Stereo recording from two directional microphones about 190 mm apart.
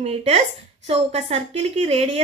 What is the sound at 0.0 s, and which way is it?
A woman's voice, 35° right (ahead or behind).